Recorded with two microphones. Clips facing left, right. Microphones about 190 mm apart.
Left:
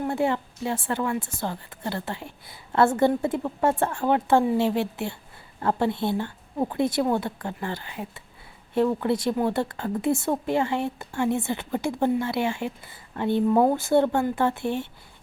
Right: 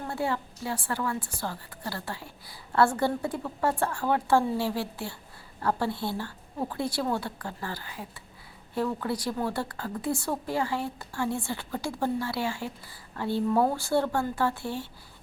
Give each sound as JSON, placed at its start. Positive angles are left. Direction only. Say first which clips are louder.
{"t": 0.1, "sound": "a woman's voice", "louder": "left 5 dB", "side_deg": 20}